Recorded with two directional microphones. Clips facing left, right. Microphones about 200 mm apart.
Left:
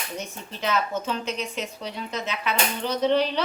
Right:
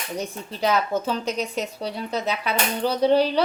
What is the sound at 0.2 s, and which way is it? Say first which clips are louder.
Speech: right 9 dB; 35° right (ahead or behind).